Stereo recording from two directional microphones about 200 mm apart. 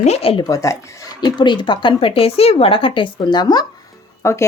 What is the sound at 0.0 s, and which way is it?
Speech, 30° left (ahead or behind).